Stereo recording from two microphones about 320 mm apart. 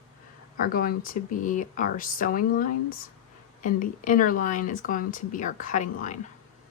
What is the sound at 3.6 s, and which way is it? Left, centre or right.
Speech, left.